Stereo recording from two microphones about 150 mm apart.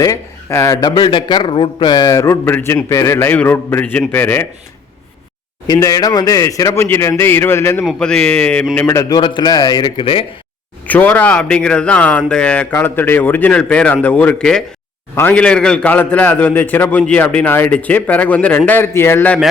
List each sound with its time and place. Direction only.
0.0 s a man's voice: 20° left (ahead or behind)
5.6 s a man's voice: 25° left (ahead or behind)
7.9 s a man's voice: 5° left (ahead or behind); by 10.2 s 35° left (ahead or behind)
10.8 s a man's voice: 10° left (ahead or behind)